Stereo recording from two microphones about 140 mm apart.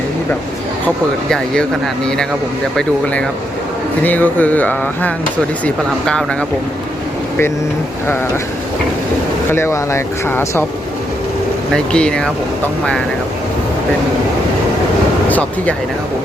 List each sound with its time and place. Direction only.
2.7 s speech: 5° left (ahead or behind)
9.5 s speech: 20° left (ahead or behind)
11.7 s speech: 5° left (ahead or behind)
15.3 s speech: 10° left (ahead or behind)